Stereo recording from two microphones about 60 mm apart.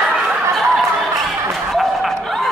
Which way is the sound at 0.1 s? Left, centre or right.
Centre.